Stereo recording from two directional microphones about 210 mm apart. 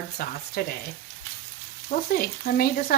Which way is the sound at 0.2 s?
45° left (ahead or behind).